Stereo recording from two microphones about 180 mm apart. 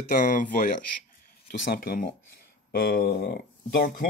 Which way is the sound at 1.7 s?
55° left (ahead or behind).